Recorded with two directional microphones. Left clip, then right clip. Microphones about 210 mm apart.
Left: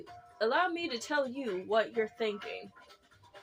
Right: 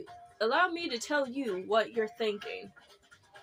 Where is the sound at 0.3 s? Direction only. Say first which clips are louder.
Right 2 dB; 15° right (ahead or behind).